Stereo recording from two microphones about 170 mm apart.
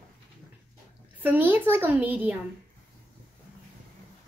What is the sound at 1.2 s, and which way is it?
A child's voice, 10° right (ahead or behind).